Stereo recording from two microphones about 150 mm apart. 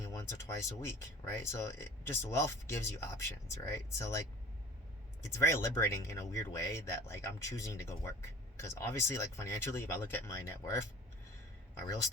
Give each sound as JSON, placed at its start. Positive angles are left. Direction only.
{"t": 0.0, "sound": "speech", "side_deg": 20}
{"t": 5.3, "sound": "speech", "side_deg": 20}